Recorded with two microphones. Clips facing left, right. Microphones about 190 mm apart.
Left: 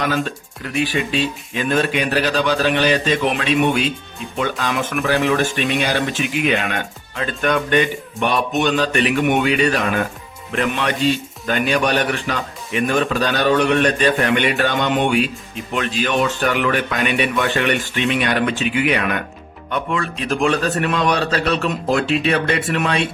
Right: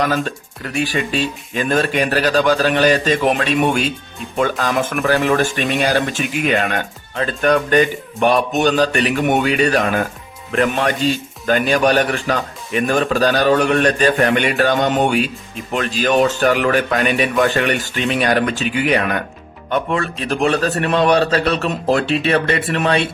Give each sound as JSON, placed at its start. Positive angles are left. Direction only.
{"t": 0.3, "sound": "a man's voice", "side_deg": -45}